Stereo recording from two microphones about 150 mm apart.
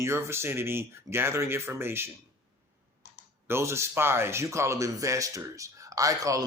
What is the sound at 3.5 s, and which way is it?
Speech, 15° right (ahead or behind).